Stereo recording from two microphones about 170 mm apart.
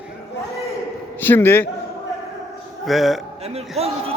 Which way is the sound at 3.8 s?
35° right (ahead or behind).